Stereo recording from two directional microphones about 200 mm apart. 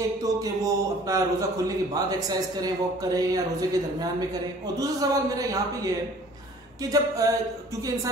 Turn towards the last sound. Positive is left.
turn(degrees=-15)  # may be behind; listen again after turning